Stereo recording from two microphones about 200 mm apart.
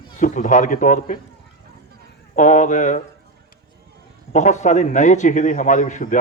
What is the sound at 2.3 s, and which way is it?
Speech, 35° left (ahead or behind).